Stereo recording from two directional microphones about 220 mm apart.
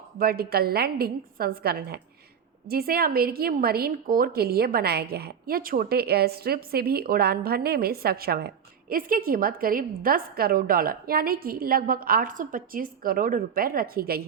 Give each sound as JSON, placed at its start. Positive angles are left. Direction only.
{"t": 0.2, "sound": "a woman's voice", "side_deg": -45}